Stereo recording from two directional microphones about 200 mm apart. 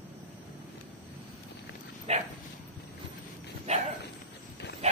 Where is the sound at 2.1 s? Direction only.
30° right (ahead or behind).